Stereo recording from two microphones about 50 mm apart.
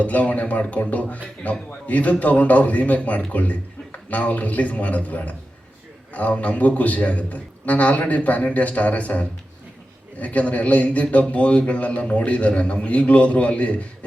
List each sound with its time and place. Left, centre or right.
0.0 s a man's voice: left